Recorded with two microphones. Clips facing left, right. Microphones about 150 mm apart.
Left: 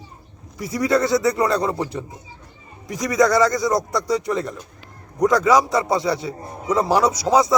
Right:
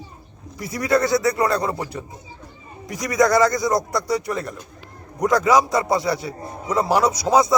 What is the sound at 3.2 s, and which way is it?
Speech, 15° right (ahead or behind).